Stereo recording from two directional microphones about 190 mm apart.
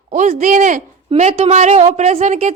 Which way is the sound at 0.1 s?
40° right (ahead or behind).